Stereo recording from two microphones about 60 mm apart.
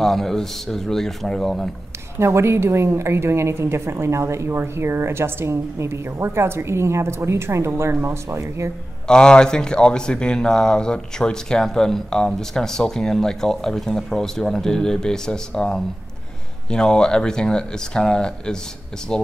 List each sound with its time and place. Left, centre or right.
0.0 s speech: centre
2.1 s a woman's voice: right
9.0 s speech: centre